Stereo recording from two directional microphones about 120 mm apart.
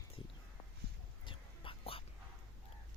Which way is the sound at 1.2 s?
45° left (ahead or behind).